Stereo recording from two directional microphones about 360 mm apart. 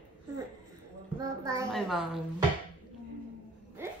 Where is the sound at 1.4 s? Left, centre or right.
Centre.